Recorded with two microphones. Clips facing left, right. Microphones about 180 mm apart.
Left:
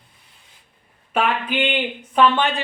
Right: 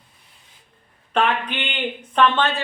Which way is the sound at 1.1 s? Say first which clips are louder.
Even; 10° left (ahead or behind).